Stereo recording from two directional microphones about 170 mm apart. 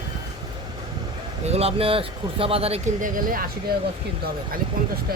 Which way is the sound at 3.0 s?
55° right (ahead or behind).